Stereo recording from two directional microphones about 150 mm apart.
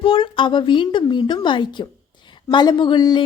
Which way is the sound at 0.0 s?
35° left (ahead or behind).